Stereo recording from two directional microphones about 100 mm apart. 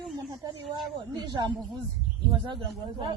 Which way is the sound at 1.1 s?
45° right (ahead or behind).